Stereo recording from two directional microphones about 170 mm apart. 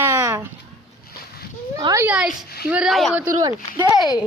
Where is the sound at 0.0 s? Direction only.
15° right (ahead or behind).